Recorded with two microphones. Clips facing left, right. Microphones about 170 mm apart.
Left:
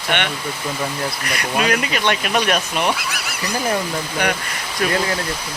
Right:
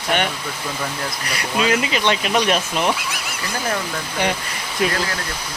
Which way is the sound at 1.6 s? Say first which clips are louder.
Right 2 dB; 25° right (ahead or behind).